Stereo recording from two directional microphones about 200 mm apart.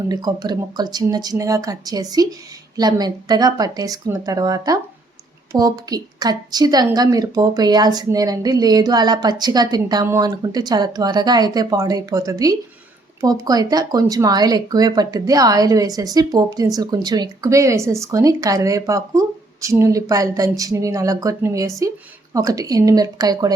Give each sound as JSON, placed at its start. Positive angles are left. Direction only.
{"t": 0.1, "sound": "a woman's voice", "side_deg": -20}